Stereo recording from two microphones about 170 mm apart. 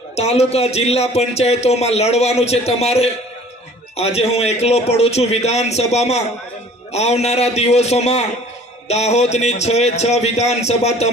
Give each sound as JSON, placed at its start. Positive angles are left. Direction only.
{"t": 0.2, "sound": "a man's voice", "side_deg": 40}